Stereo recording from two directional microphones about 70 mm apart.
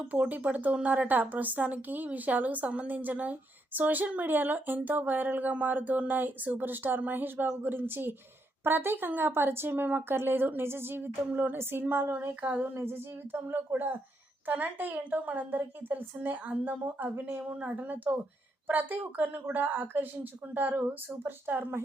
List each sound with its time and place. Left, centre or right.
0.0 s a woman's voice: right